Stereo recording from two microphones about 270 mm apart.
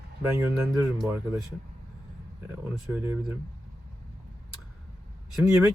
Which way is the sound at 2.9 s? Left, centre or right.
Centre.